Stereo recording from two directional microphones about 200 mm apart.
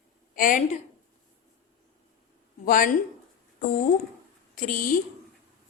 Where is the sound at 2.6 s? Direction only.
45° left (ahead or behind).